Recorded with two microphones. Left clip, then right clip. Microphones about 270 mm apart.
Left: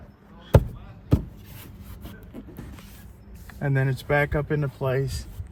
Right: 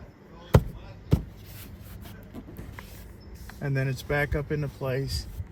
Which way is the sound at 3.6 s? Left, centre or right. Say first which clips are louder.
Left 4 dB; centre.